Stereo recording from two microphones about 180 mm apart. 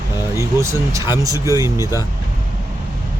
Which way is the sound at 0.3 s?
15° right (ahead or behind).